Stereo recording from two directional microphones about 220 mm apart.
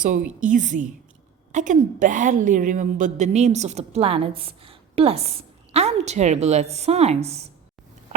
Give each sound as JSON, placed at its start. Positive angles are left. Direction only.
{"t": 0.3, "sound": "a woman's voice", "side_deg": -35}